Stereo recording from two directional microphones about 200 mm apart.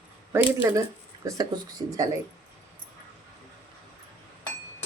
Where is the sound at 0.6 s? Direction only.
15° right (ahead or behind).